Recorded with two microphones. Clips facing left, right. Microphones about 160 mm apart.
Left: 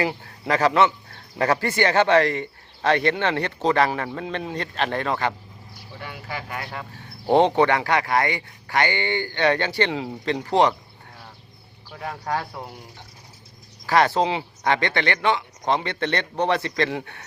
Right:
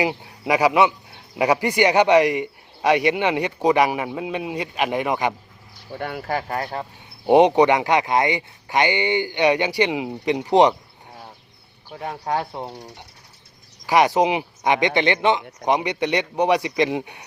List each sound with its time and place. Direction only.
0.0 s speech: 15° right (ahead or behind)
5.9 s speech: 55° right (ahead or behind); by 6.8 s 40° right (ahead or behind)
7.3 s speech: 15° right (ahead or behind)
11.9 s speech: 20° right (ahead or behind)
13.8 s speech: 15° right (ahead or behind)